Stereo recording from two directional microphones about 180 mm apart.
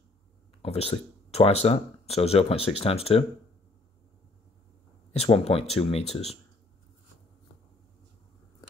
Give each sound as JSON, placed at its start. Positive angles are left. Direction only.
{"t": 0.6, "sound": "speech", "side_deg": 35}
{"t": 5.1, "sound": "speech", "side_deg": 35}